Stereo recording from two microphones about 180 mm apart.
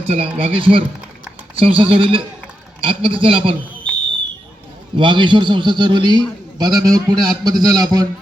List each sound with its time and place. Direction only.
0.0 s a man's voice: 35° right (ahead or behind)
4.9 s a man's voice: 25° right (ahead or behind)